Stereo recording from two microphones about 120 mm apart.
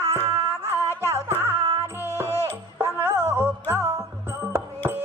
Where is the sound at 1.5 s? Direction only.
50° right (ahead or behind).